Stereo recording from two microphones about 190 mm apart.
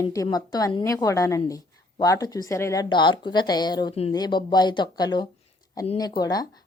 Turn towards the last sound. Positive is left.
turn(degrees=20)  # may be behind; listen again after turning